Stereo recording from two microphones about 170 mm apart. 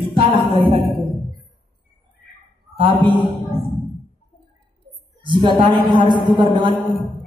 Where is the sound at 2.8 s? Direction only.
30° right (ahead or behind).